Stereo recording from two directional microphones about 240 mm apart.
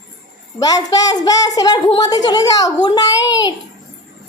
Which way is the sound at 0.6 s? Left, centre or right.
Centre.